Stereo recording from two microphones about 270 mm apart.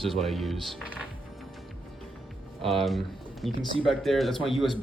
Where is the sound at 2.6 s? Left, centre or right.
Centre.